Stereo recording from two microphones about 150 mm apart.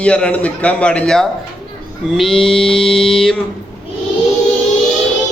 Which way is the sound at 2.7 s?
5° left (ahead or behind).